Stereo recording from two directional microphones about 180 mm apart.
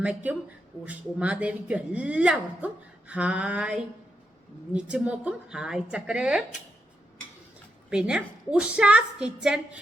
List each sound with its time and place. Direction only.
0.0 s a woman's voice: 10° right (ahead or behind)
7.9 s a woman's voice: 5° right (ahead or behind)